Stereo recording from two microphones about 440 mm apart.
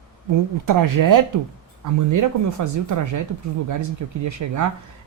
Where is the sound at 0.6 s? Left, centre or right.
Right.